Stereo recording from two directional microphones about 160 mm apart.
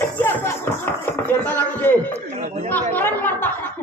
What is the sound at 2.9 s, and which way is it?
Speech, 10° left (ahead or behind).